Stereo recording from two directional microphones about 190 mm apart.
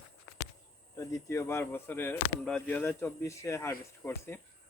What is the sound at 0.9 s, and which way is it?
Speech, 15° left (ahead or behind).